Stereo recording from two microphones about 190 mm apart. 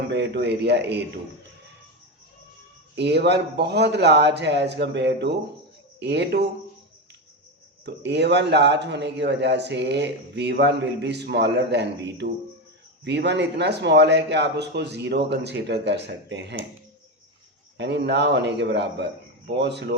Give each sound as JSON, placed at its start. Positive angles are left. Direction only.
{"t": 0.1, "sound": "speech", "side_deg": -65}
{"t": 2.9, "sound": "speech", "side_deg": -60}
{"t": 7.9, "sound": "speech", "side_deg": -65}
{"t": 17.7, "sound": "speech", "side_deg": -65}